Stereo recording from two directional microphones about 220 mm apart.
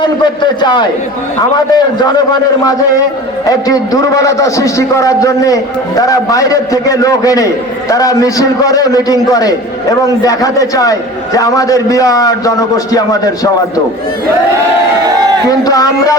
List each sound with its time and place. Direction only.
0.0 s a man's voice: 20° left (ahead or behind)
3.4 s a man's voice: 15° left (ahead or behind)
15.4 s a man's voice: 15° left (ahead or behind)